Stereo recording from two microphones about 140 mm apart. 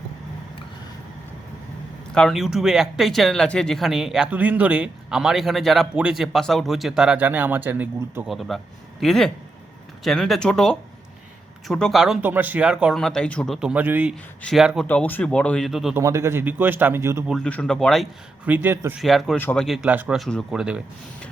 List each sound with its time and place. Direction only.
2.1 s speech: 5° left (ahead or behind); by 8.2 s 15° right (ahead or behind)
8.3 s speech: centre (ahead or behind)
13.6 s speech: 10° right (ahead or behind)
14.8 s speech: 15° left (ahead or behind)
16.0 s speech: 20° right (ahead or behind)
17.2 s speech: 5° left (ahead or behind)
18.4 s speech: 10° right (ahead or behind)
18.9 s speech: centre (ahead or behind)
19.4 s speech: 15° left (ahead or behind)
19.6 s speech: centre (ahead or behind)
20.1 s speech: centre (ahead or behind)